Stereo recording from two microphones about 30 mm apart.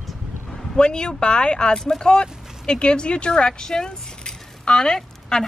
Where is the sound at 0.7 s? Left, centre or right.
Left.